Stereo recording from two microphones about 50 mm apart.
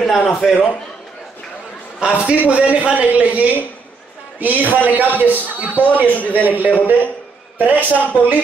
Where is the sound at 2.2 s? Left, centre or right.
Right.